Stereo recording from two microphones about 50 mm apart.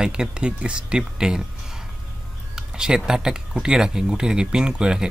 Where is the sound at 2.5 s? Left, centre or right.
Centre.